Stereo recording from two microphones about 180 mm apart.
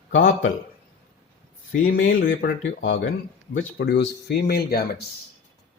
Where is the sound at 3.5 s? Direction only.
75° left (ahead or behind); by 4.8 s 60° left (ahead or behind).